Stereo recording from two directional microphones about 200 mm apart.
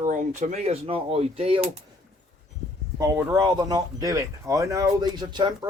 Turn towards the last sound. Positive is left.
turn(degrees=-20)  # may be behind; listen again after turning